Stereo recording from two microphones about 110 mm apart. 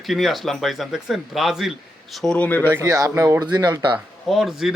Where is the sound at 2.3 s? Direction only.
15° left (ahead or behind).